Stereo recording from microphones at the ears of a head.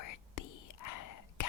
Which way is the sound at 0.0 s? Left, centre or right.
Left.